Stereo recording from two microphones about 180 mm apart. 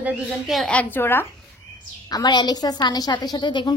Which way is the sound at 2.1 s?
25° left (ahead or behind).